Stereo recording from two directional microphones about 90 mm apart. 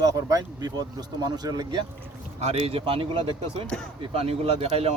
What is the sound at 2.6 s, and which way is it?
Speech, 90° right.